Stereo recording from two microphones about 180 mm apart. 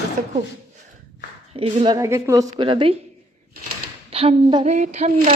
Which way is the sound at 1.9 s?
15° right (ahead or behind).